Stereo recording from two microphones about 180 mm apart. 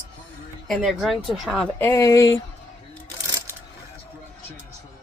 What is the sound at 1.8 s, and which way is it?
Speech, 15° left (ahead or behind).